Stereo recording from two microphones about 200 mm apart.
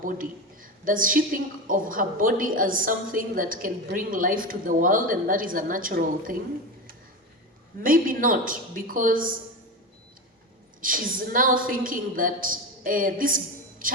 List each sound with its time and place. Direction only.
0.0 s a sound: 45° right (ahead or behind)
1.6 s a woman's voice: 45° right (ahead or behind)
7.8 s a woman's voice: 45° right (ahead or behind)
10.8 s a woman's voice: 45° right (ahead or behind)